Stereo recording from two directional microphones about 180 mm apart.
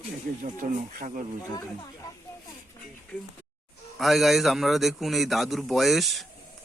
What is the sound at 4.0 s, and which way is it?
A man's voice, centre (ahead or behind).